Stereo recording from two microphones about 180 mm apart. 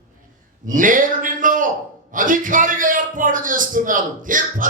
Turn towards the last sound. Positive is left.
turn(degrees=-45)  # may be behind; listen again after turning